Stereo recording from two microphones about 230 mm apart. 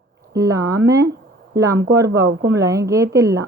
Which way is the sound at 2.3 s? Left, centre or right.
Right.